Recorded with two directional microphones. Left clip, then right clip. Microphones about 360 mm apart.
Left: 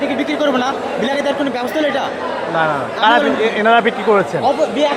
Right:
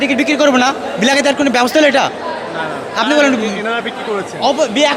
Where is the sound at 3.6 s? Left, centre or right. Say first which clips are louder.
Left 6 dB; centre.